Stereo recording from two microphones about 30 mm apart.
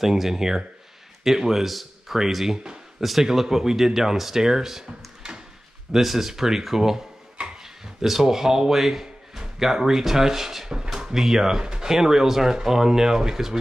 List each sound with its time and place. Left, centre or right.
0.0 s speech: centre
2.4 s speech: centre
3.0 s speech: centre
5.9 s speech: centre
10.7 s speech: right